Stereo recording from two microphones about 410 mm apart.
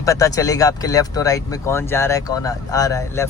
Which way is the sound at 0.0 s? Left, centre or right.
Centre.